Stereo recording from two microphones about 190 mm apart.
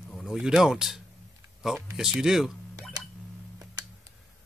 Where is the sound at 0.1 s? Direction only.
Centre (ahead or behind).